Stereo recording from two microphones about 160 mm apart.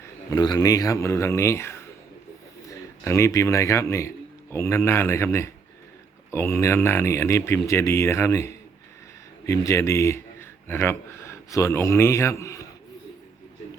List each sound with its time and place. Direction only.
0.3 s a man's voice: 25° left (ahead or behind)